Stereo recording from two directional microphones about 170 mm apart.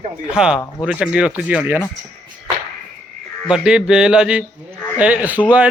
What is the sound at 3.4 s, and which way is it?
Speech, 5° right (ahead or behind).